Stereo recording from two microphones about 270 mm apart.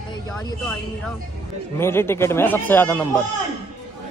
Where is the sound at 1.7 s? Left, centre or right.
Centre.